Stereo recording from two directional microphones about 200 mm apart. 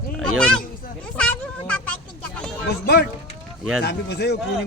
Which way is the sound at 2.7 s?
55° left (ahead or behind).